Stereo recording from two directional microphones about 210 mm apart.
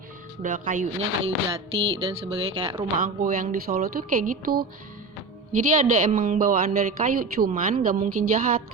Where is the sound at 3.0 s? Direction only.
40° right (ahead or behind).